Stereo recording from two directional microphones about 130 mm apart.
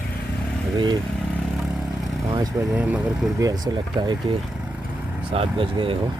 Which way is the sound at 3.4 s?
30° right (ahead or behind).